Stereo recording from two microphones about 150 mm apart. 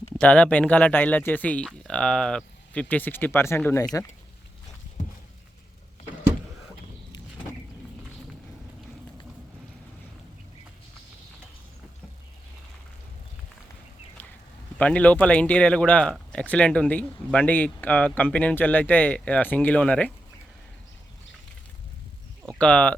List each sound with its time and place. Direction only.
0.2 s speech: 10° left (ahead or behind)
14.8 s speech: 10° left (ahead or behind)
22.4 s speech: 10° left (ahead or behind)